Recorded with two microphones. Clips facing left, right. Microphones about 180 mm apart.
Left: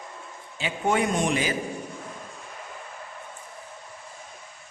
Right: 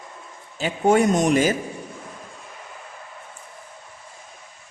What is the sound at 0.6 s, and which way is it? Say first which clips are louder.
Speech: right 7 dB; 40° right (ahead or behind).